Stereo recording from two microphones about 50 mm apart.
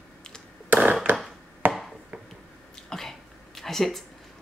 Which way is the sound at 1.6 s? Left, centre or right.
Right.